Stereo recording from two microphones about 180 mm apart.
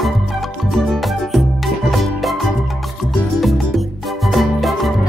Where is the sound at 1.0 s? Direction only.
Centre (ahead or behind).